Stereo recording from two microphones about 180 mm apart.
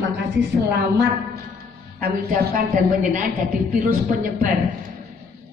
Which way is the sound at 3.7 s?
45° right (ahead or behind).